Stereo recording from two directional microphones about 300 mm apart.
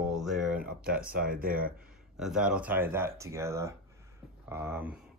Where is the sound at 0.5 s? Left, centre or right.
Right.